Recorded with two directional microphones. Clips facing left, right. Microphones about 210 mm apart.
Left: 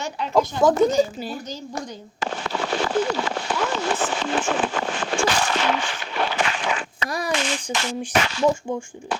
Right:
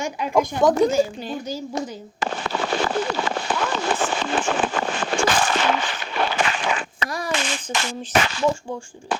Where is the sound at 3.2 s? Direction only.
50° right (ahead or behind).